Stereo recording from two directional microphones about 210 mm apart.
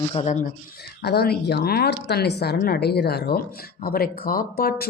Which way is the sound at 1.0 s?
50° left (ahead or behind).